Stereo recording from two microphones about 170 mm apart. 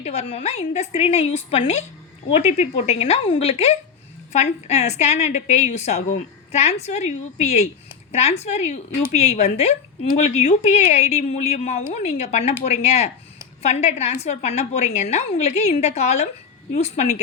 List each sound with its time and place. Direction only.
0.0 s speech: 40° left (ahead or behind)